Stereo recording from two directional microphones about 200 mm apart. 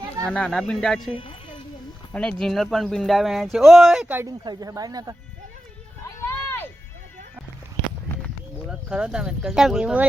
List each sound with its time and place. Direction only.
0.3 s speech: 5° left (ahead or behind)
1.1 s speech: 25° left (ahead or behind)
2.1 s speech: 5° left (ahead or behind); by 5.1 s 20° right (ahead or behind)
6.2 s a sound: 10° left (ahead or behind)
8.7 s speech: 5° right (ahead or behind)